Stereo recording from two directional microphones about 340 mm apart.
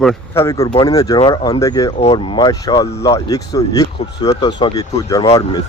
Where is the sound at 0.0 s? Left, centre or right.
Centre.